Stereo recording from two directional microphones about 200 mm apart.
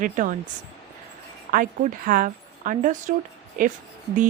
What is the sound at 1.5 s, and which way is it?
A woman's voice, 45° right (ahead or behind).